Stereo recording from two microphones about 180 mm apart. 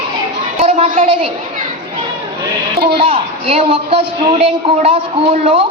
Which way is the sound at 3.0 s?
35° right (ahead or behind).